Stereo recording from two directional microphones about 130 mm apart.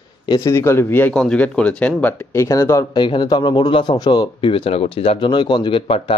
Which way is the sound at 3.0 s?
35° left (ahead or behind).